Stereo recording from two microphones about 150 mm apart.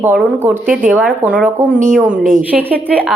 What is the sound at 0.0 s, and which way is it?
Speech, 10° right (ahead or behind).